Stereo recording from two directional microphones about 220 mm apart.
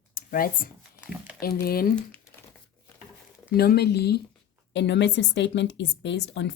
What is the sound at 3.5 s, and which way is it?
A woman's voice, 45° left (ahead or behind).